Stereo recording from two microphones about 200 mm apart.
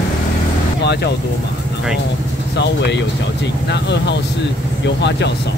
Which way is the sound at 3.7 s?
60° left (ahead or behind).